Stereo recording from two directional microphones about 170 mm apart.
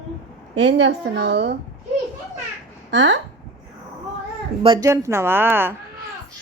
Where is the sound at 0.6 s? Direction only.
90° right.